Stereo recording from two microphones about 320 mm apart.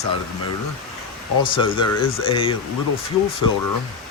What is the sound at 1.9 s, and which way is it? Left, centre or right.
Speech, left.